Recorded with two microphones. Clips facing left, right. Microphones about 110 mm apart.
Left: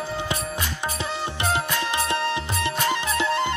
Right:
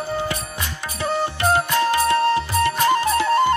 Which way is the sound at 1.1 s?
45° right (ahead or behind).